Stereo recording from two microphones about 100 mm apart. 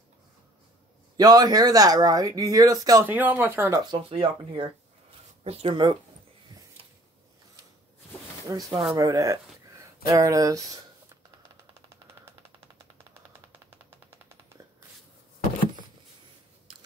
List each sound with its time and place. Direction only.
1.1 s speech: 40° right (ahead or behind)
3.1 s speech: 15° right (ahead or behind)
3.9 s speech: 65° right (ahead or behind)
8.5 s speech: 35° right (ahead or behind)